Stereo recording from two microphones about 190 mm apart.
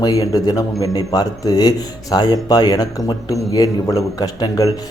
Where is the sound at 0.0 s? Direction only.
20° left (ahead or behind).